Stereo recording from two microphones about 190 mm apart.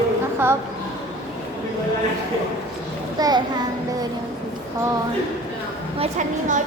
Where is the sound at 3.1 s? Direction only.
20° right (ahead or behind).